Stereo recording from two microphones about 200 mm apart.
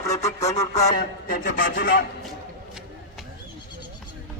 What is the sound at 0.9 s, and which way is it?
Speech, 45° left (ahead or behind).